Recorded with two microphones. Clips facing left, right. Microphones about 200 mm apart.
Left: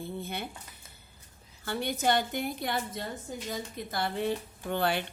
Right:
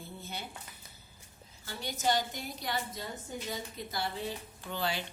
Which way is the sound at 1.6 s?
60° left (ahead or behind).